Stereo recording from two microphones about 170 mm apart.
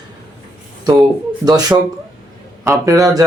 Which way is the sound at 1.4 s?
20° right (ahead or behind).